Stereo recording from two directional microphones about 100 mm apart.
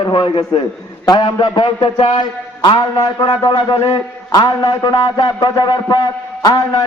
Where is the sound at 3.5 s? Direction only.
50° left (ahead or behind).